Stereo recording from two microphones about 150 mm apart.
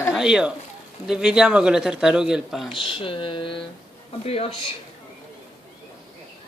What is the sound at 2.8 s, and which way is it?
Speech, 35° left (ahead or behind).